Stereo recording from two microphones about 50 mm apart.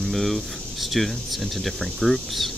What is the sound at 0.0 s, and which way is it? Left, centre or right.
Speech, centre.